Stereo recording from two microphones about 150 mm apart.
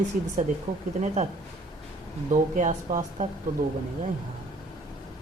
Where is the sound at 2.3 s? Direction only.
60° right (ahead or behind).